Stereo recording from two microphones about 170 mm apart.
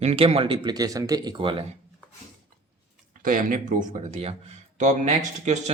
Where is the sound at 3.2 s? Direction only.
50° right (ahead or behind).